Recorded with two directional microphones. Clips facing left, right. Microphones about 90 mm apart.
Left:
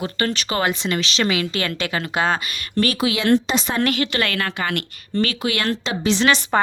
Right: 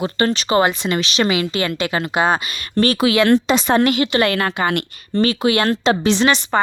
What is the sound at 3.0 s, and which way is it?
Speech, 55° right (ahead or behind).